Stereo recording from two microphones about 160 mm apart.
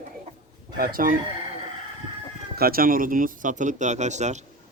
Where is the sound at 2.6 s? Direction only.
65° right (ahead or behind); by 4.4 s 45° right (ahead or behind).